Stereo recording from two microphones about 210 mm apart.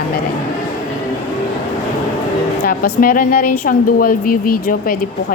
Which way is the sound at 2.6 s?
45° left (ahead or behind).